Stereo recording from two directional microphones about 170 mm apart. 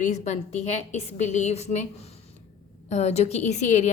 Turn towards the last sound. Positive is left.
turn(degrees=40)  # may be behind; listen again after turning